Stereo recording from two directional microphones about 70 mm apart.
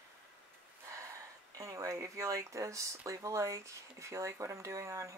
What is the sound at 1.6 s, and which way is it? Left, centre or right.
Speech, right.